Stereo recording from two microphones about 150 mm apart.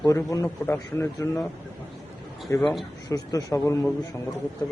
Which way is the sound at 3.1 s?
20° left (ahead or behind).